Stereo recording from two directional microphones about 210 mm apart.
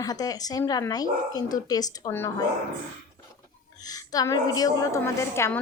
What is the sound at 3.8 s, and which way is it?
A woman's voice, 15° left (ahead or behind).